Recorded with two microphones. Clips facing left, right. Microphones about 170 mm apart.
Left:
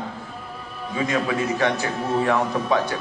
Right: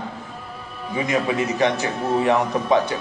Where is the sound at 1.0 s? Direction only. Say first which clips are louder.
Right 1 dB; 20° right (ahead or behind).